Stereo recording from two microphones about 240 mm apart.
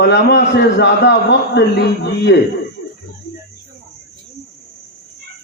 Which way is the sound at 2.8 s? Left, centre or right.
Left.